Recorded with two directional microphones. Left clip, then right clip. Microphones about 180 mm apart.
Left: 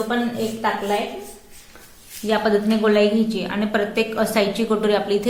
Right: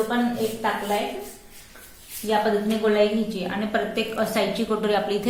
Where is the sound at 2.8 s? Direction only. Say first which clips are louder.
Left 2 dB; 35° left (ahead or behind).